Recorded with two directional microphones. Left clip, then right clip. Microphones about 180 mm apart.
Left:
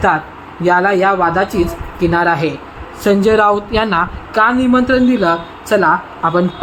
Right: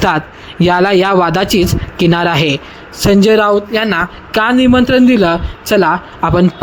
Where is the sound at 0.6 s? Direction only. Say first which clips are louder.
Right 1 dB; 45° right (ahead or behind).